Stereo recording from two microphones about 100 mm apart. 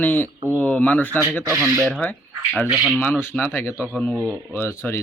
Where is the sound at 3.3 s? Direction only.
20° left (ahead or behind).